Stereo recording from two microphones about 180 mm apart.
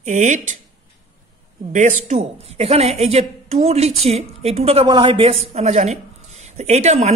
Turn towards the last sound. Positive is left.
turn(degrees=-40)  # may be behind; listen again after turning